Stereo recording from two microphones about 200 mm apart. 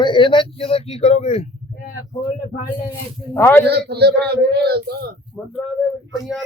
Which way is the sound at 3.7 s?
55° right (ahead or behind).